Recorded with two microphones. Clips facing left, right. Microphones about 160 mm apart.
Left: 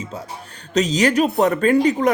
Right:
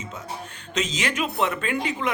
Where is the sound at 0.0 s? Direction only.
35° left (ahead or behind).